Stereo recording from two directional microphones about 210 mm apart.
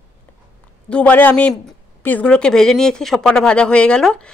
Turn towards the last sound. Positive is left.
turn(degrees=5)  # may be behind; listen again after turning